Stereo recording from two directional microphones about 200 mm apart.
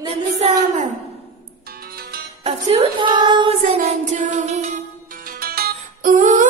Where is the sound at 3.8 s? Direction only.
40° right (ahead or behind).